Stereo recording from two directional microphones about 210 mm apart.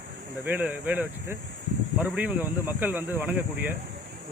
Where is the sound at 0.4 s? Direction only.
10° right (ahead or behind).